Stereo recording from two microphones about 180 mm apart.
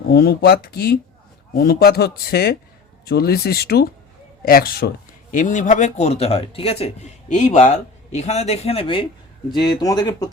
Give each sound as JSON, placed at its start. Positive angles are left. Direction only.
{"t": 0.1, "sound": "a man's voice", "side_deg": 60}
{"t": 5.3, "sound": "speech", "side_deg": 45}